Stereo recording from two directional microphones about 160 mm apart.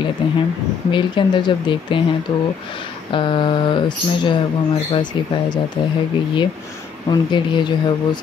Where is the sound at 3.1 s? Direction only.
30° left (ahead or behind).